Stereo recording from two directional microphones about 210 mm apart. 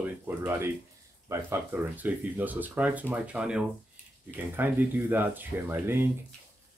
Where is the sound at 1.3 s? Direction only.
10° right (ahead or behind).